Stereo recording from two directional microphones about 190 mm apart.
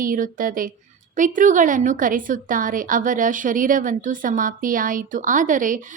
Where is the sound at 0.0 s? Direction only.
45° right (ahead or behind).